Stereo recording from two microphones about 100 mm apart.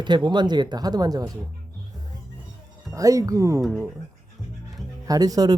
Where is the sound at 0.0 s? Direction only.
50° right (ahead or behind).